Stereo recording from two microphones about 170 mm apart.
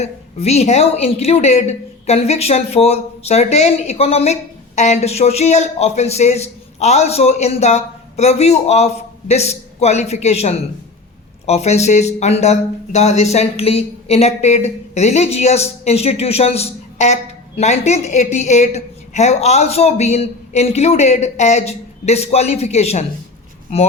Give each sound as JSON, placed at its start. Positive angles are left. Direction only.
{"t": 0.0, "sound": "a woman's voice", "side_deg": 40}